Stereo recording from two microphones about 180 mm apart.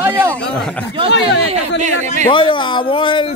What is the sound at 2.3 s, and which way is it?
Speech, 25° left (ahead or behind).